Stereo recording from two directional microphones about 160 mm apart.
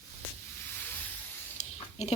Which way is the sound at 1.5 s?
45° left (ahead or behind).